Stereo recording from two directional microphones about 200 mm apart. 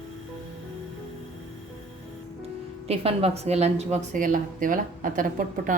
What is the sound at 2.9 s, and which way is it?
A woman's voice, 30° right (ahead or behind).